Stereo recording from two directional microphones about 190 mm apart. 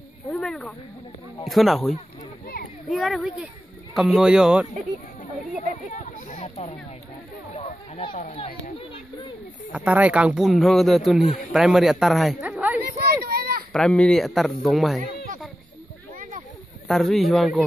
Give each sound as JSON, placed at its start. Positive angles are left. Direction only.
{"t": 0.3, "sound": "speech", "side_deg": 5}
{"t": 5.9, "sound": "speech", "side_deg": 40}
{"t": 7.5, "sound": "a sound", "side_deg": 35}
{"t": 8.2, "sound": "speech", "side_deg": 30}
{"t": 9.7, "sound": "speech", "side_deg": -10}
{"t": 11.2, "sound": "speech", "side_deg": 40}
{"t": 11.5, "sound": "a man's voice", "side_deg": 0}
{"t": 13.2, "sound": "a sound", "side_deg": -50}
{"t": 13.7, "sound": "speech", "side_deg": 5}
{"t": 15.0, "sound": "a sound", "side_deg": -45}
{"t": 16.8, "sound": "speech", "side_deg": 0}